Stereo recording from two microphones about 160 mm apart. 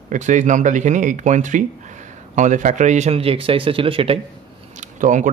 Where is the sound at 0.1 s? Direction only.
50° right (ahead or behind); by 4.2 s 35° right (ahead or behind).